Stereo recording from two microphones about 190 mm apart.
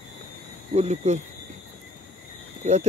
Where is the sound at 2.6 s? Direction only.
35° right (ahead or behind).